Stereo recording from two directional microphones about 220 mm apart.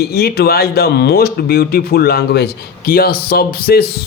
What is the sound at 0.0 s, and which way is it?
Speech, 45° left (ahead or behind).